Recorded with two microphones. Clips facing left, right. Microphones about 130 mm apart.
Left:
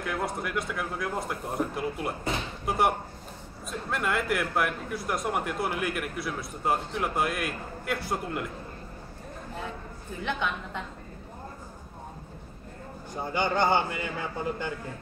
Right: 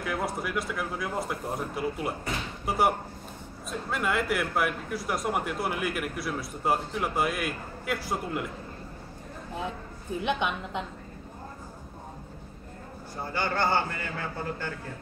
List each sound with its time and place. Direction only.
0.0 s speech: centre (ahead or behind)
3.9 s speech: centre (ahead or behind)
10.2 s a woman's voice: 15° right (ahead or behind)
13.1 s a man's voice: 20° left (ahead or behind)